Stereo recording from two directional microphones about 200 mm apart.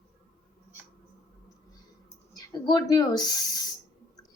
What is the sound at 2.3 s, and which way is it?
Speech, 20° left (ahead or behind).